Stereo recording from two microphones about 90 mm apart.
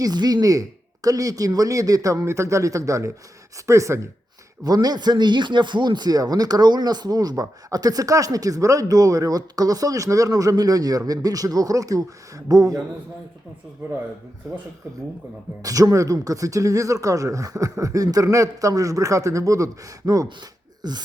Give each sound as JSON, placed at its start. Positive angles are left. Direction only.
{"t": 0.0, "sound": "speech", "side_deg": -50}
{"t": 4.6, "sound": "speech", "side_deg": -45}
{"t": 15.6, "sound": "speech", "side_deg": -40}
{"t": 20.8, "sound": "speech", "side_deg": -50}